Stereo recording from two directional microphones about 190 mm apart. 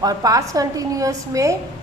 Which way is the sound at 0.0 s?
20° right (ahead or behind).